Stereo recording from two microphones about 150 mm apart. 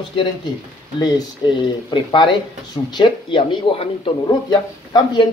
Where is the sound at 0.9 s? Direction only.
25° left (ahead or behind).